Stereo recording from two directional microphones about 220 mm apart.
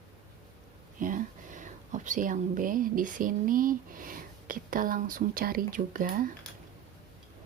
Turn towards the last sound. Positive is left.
turn(degrees=-40)  # may be behind; listen again after turning